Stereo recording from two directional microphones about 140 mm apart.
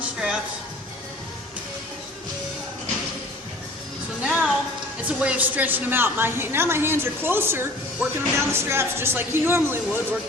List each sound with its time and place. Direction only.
0.0 s music: 5° right (ahead or behind)
4.2 s music: 5° right (ahead or behind)
5.0 s a woman's voice: 10° right (ahead or behind)